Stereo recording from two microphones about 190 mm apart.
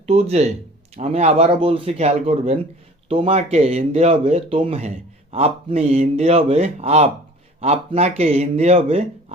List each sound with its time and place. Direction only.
0.0 s speech: 35° right (ahead or behind)